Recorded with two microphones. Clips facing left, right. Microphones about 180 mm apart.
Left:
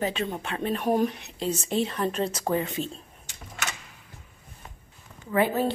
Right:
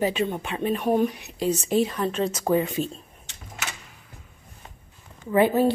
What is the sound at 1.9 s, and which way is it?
Speech, centre (ahead or behind).